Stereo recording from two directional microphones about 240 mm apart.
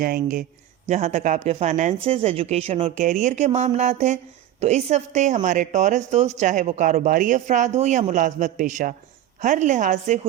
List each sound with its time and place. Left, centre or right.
0.0 s a woman's voice: right